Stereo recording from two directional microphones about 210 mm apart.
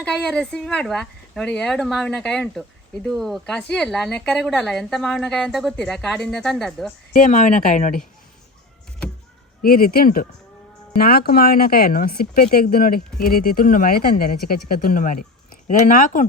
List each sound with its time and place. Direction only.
0.0 s speech: 5° left (ahead or behind)
7.1 s speech: 35° left (ahead or behind)
9.6 s speech: 45° left (ahead or behind)